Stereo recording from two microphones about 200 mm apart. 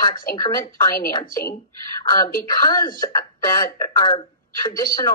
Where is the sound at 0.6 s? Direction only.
45° left (ahead or behind).